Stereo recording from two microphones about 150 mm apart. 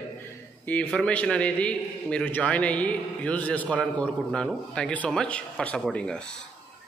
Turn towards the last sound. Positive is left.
turn(degrees=5)  # may be behind; listen again after turning